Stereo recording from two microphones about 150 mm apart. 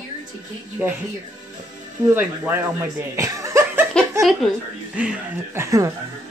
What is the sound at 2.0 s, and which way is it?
Speech, 15° right (ahead or behind).